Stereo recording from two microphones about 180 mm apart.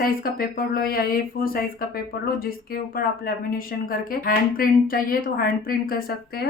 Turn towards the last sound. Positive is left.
turn(degrees=55)  # may be behind; listen again after turning